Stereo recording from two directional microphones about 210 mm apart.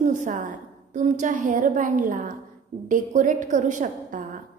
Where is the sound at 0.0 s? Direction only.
35° right (ahead or behind).